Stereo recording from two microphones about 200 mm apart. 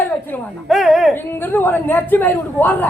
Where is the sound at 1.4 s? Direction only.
10° left (ahead or behind).